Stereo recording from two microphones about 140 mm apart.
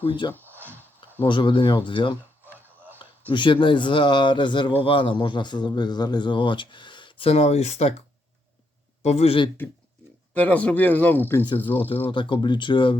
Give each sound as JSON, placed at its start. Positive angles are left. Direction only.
{"t": 0.0, "sound": "speech", "side_deg": 35}
{"t": 0.3, "sound": "a sound", "side_deg": -15}
{"t": 1.2, "sound": "speech", "side_deg": 35}
{"t": 2.4, "sound": "a sound", "side_deg": -15}
{"t": 3.2, "sound": "speech", "side_deg": 35}
{"t": 9.0, "sound": "speech", "side_deg": 50}
{"t": 10.3, "sound": "speech", "side_deg": 10}
{"t": 11.4, "sound": "speech", "side_deg": 35}